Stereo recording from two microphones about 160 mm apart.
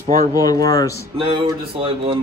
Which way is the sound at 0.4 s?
25° left (ahead or behind).